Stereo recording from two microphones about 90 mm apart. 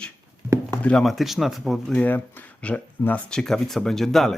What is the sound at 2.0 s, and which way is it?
Speech, 20° left (ahead or behind).